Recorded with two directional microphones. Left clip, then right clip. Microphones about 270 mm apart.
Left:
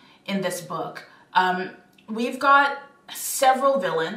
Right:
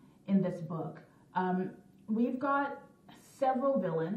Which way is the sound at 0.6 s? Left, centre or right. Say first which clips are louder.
Left 11 dB; left.